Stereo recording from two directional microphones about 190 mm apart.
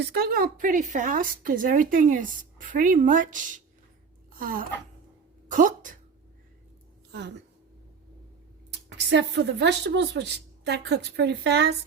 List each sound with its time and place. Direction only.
0.0 s a woman's voice: 55° right (ahead or behind)
4.3 s a sound: 45° right (ahead or behind)
5.5 s speech: 45° right (ahead or behind)
8.9 s a woman's voice: 65° right (ahead or behind)